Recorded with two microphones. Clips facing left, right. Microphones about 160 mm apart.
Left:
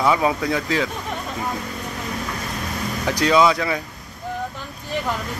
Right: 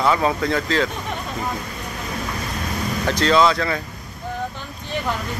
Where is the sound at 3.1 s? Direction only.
10° left (ahead or behind).